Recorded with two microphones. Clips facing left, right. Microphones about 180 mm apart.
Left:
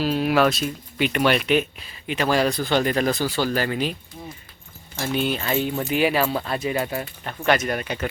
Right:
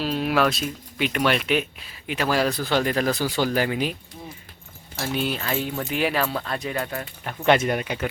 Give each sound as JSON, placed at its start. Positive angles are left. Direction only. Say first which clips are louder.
{"t": 0.0, "sound": "speech", "louder": "left 3 dB", "side_deg": 0}
{"t": 3.2, "sound": "speech", "louder": "even", "side_deg": -15}
{"t": 4.9, "sound": "speech", "louder": "left 2 dB", "side_deg": 0}
{"t": 7.4, "sound": "speech", "louder": "right 2 dB", "side_deg": -25}
{"t": 7.8, "sound": "speech", "louder": "even", "side_deg": -10}